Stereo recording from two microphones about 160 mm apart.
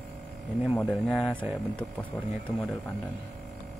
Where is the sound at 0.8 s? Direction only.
5° left (ahead or behind).